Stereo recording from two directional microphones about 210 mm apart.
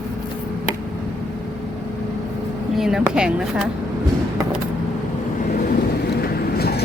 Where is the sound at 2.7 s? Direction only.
Centre (ahead or behind).